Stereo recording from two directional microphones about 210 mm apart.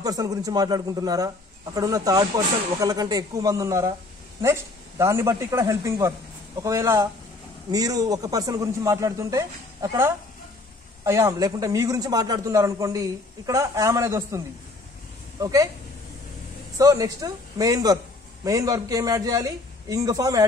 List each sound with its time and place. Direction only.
0.0 s a man's voice: 15° right (ahead or behind)
15.4 s a man's voice: 15° right (ahead or behind)
16.7 s a man's voice: 15° right (ahead or behind)